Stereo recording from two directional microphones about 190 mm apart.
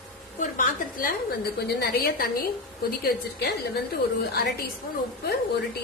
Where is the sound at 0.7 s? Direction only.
50° left (ahead or behind).